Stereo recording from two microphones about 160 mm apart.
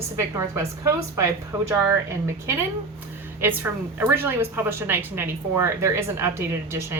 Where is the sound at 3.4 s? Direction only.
10° right (ahead or behind).